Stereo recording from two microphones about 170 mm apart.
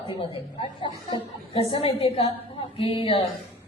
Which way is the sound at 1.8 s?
35° left (ahead or behind).